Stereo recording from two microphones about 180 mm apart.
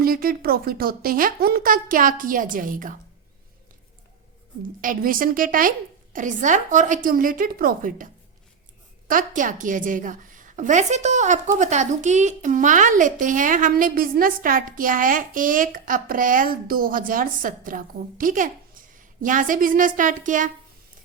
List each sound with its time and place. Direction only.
0.0 s speech: 55° right (ahead or behind)
4.8 s speech: 50° right (ahead or behind)